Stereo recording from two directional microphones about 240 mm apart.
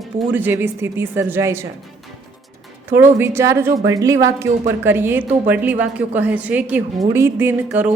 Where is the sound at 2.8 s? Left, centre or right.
Centre.